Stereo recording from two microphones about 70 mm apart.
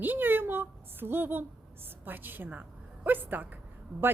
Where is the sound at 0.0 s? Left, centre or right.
Right.